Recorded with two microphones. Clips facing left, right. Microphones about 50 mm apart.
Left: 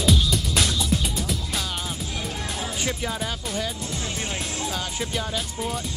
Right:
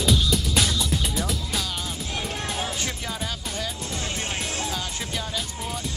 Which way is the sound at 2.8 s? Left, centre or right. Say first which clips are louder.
Left 3 dB; centre.